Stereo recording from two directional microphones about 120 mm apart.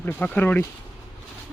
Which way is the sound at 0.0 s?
15° left (ahead or behind).